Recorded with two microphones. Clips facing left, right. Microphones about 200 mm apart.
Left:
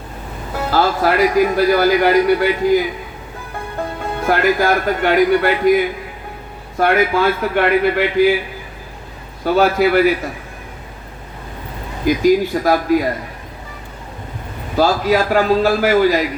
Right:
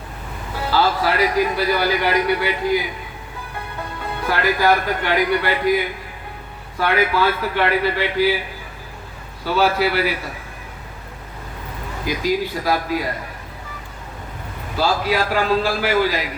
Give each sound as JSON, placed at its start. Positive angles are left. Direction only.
{"t": 0.7, "sound": "a man's voice", "side_deg": 50}
{"t": 9.4, "sound": "a man's voice", "side_deg": 50}
{"t": 12.0, "sound": "a man's voice", "side_deg": 45}
{"t": 14.8, "sound": "a man's voice", "side_deg": 45}